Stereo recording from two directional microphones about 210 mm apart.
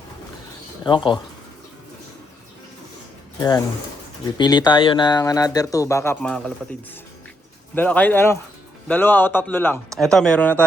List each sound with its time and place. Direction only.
0.9 s speech: 25° left (ahead or behind)
4.4 s speech: 20° left (ahead or behind); by 6.5 s 5° left (ahead or behind)
7.8 s speech: 5° left (ahead or behind)